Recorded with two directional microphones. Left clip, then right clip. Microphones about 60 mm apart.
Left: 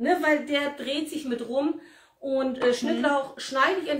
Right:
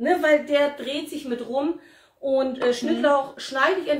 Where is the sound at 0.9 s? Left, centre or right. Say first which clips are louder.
Right 1 dB; right.